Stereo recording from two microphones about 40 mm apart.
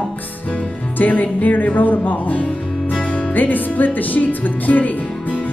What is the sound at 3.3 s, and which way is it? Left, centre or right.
Speech, left.